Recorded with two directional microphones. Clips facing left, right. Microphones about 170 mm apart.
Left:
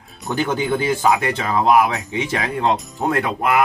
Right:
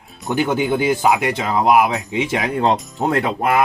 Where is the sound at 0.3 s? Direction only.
15° right (ahead or behind).